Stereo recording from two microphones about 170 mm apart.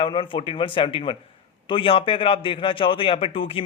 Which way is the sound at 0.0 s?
30° left (ahead or behind).